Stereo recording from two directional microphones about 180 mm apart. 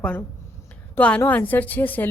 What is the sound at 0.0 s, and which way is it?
A woman's voice, 10° left (ahead or behind).